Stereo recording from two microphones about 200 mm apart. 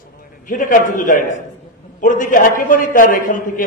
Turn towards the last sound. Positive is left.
turn(degrees=40)  # may be behind; listen again after turning